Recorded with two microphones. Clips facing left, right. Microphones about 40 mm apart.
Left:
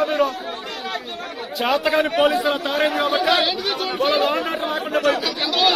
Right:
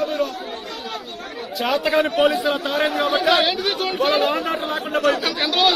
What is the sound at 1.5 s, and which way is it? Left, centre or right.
Speech, left.